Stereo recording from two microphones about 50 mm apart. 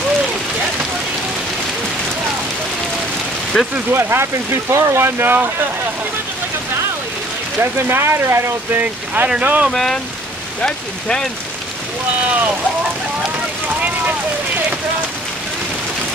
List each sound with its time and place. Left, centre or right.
3.5 s speech: centre
3.9 s speech: right
7.9 s speech: right
8.7 s speech: right
9.7 s speech: centre